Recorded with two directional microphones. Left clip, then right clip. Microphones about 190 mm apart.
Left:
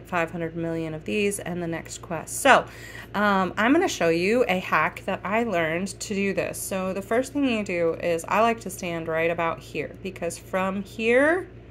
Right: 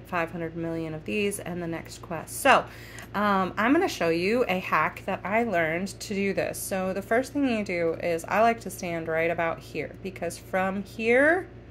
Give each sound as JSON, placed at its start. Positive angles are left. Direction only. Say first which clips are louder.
{"t": 0.1, "sound": "a woman's voice", "louder": "left 3 dB", "side_deg": 20}